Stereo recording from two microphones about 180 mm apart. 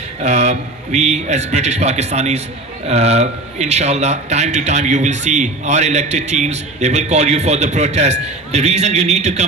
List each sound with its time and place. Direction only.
0.2 s a man's voice: 40° right (ahead or behind)